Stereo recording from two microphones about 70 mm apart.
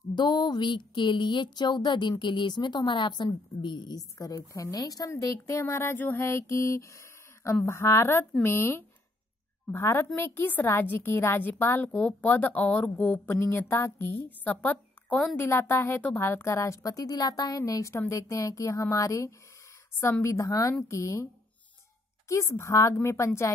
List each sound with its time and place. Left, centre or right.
0.1 s a woman's voice: left
5.6 s mantra: left
10.1 s a woman's voice: left
10.7 s mantra: left
11.9 s a woman's voice: left
13.3 s mantra: left
14.4 s a woman's voice: left
15.3 s mantra: left
16.2 s a woman's voice: left
20.0 s mantra: left
20.4 s speech: left
20.9 s a woman's voice: left
22.3 s a woman's voice: left